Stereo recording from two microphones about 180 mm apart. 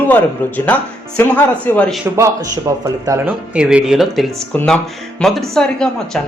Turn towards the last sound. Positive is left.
turn(degrees=5)  # may be behind; listen again after turning